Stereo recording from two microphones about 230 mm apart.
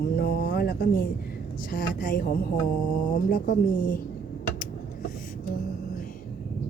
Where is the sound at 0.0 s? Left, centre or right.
Left.